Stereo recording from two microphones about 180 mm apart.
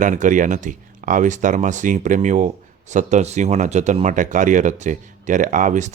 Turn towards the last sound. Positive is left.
turn(degrees=-45)  # may be behind; listen again after turning